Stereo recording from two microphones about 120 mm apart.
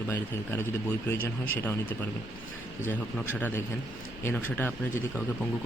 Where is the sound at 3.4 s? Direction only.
15° left (ahead or behind).